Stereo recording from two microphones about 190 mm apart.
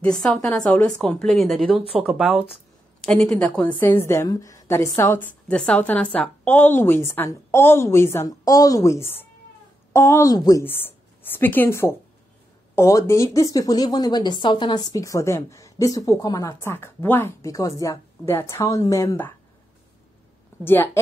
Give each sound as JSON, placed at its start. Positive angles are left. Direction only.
{"t": 0.2, "sound": "a woman's voice", "side_deg": 5}
{"t": 20.6, "sound": "a woman's voice", "side_deg": 10}